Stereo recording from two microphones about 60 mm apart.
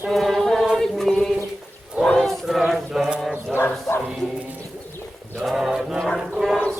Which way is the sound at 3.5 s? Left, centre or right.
Left.